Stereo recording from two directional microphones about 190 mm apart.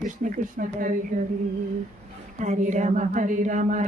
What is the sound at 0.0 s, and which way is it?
Speech, 45° right (ahead or behind).